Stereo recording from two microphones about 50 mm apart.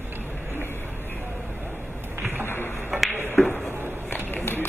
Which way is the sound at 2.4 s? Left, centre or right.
Left.